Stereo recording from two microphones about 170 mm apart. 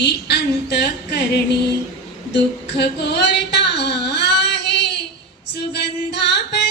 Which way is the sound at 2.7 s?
85° left.